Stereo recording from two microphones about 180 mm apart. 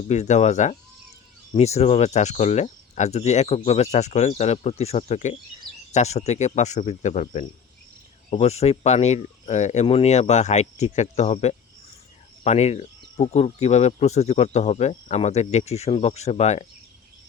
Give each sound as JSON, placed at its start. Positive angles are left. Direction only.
{"t": 0.1, "sound": "speech", "side_deg": 40}